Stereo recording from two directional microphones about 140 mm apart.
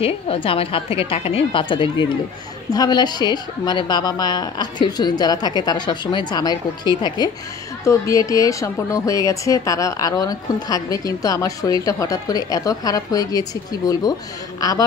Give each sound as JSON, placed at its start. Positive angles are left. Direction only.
{"t": 0.0, "sound": "a woman's voice", "side_deg": 40}